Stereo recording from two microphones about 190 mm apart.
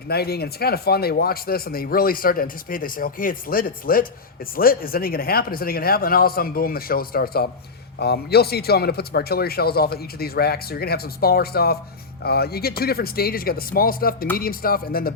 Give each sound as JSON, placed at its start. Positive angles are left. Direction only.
{"t": 0.1, "sound": "speech", "side_deg": 55}